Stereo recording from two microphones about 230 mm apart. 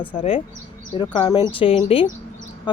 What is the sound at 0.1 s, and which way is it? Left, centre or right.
Speech, left.